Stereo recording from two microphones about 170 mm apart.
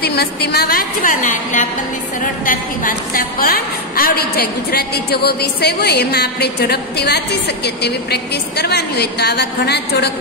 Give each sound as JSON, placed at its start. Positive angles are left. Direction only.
{"t": 0.0, "sound": "a woman's voice", "side_deg": 65}